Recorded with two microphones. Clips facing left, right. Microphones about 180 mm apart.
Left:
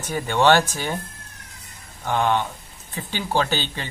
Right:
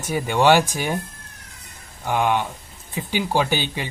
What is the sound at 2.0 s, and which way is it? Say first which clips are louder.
Speech: right 1 dB; 10° right (ahead or behind).